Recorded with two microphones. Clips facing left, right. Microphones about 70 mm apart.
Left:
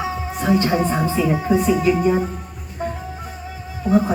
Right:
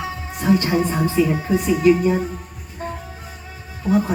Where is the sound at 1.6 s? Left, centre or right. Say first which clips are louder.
Right 1 dB; centre.